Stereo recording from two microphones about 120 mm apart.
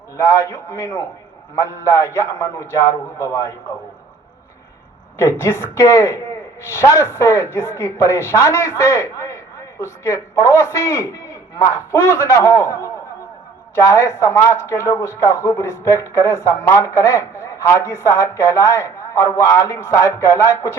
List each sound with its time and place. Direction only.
0.2 s speech: 25° left (ahead or behind)
5.1 s speech: 20° left (ahead or behind)